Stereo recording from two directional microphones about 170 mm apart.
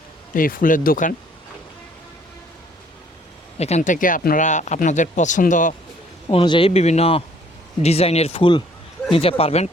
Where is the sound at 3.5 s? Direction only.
40° left (ahead or behind).